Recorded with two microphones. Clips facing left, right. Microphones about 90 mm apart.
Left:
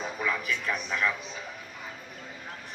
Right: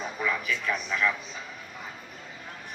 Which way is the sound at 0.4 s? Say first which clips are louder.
Right 1 dB; 40° left (ahead or behind).